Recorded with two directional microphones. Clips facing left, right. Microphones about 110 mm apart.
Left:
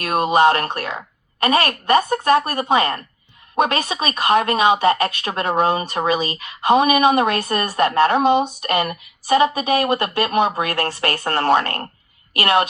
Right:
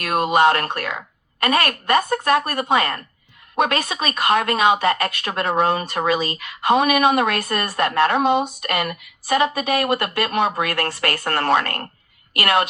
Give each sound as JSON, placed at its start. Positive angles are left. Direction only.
{"t": 0.0, "sound": "a woman's voice", "side_deg": 25}